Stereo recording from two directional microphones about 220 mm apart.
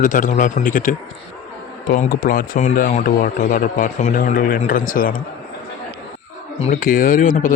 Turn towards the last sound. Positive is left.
turn(degrees=40)  # may be behind; listen again after turning